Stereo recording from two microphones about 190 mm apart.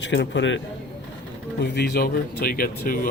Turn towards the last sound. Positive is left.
turn(degrees=50)  # may be behind; listen again after turning